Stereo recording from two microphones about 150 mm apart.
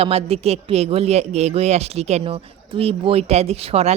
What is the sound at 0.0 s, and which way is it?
Speech, 40° right (ahead or behind).